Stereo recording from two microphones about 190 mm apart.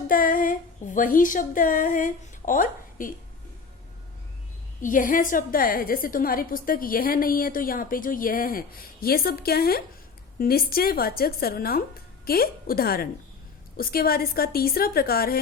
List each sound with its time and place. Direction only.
0.1 s female singing: 45° left (ahead or behind)
4.8 s a woman's voice: 45° left (ahead or behind)